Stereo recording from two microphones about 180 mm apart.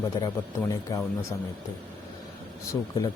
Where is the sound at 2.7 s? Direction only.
15° left (ahead or behind).